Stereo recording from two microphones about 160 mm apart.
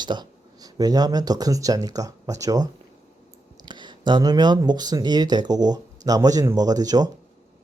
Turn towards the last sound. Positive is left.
turn(degrees=-25)  # may be behind; listen again after turning